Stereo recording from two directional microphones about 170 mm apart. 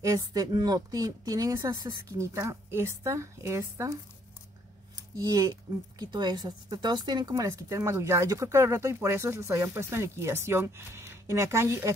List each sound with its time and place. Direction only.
0.0 s a woman's voice: 20° right (ahead or behind)
5.1 s speech: 20° right (ahead or behind)